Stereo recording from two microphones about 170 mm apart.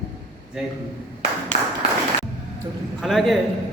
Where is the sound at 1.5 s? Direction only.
40° left (ahead or behind).